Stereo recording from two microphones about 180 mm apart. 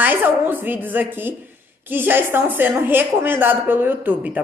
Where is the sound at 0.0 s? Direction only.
10° right (ahead or behind).